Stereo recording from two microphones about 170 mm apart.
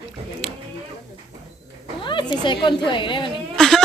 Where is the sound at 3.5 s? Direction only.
5° left (ahead or behind).